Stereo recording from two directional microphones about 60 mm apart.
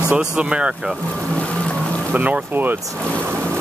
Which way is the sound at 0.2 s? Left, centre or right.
Centre.